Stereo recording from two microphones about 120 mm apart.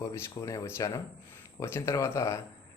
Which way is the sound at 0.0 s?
30° left (ahead or behind).